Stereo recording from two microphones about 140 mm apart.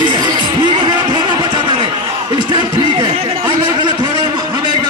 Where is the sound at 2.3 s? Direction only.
35° right (ahead or behind).